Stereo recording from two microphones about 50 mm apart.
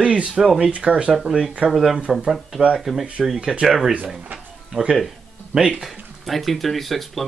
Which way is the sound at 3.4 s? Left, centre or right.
Centre.